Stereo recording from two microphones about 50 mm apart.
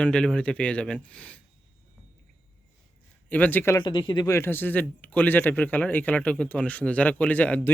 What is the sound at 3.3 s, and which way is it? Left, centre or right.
Speech, left.